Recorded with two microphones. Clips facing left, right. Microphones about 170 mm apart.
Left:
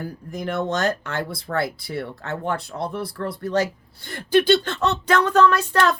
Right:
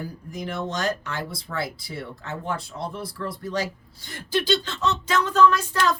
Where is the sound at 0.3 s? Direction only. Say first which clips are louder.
Left 6 dB; 55° left (ahead or behind).